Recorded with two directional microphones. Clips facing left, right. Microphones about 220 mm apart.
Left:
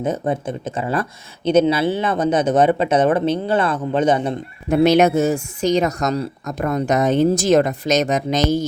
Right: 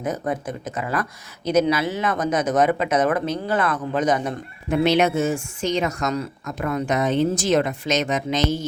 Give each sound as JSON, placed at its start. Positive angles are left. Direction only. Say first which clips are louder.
{"t": 0.0, "sound": "speech", "louder": "left 4 dB", "side_deg": 25}
{"t": 4.8, "sound": "a woman's voice", "louder": "left 5 dB", "side_deg": 40}